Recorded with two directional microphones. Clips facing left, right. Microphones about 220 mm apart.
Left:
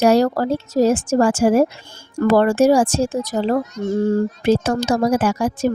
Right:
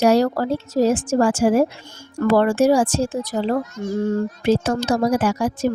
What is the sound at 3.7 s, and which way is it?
Speech, 25° left (ahead or behind).